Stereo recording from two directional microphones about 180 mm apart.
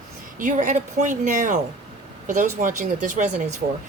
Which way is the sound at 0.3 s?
45° right (ahead or behind).